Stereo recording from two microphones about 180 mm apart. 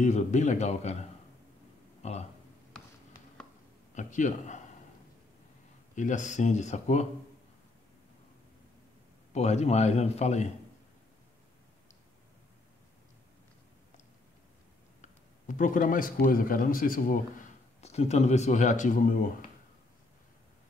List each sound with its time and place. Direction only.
0.0 s speech: 40° left (ahead or behind)
2.0 s speech: 35° left (ahead or behind)
3.9 s a man's voice: 45° left (ahead or behind)
5.9 s speech: 45° left (ahead or behind)
9.3 s speech: 40° left (ahead or behind)
15.4 s a man's voice: 45° left (ahead or behind)
17.7 s speech: 35° left (ahead or behind)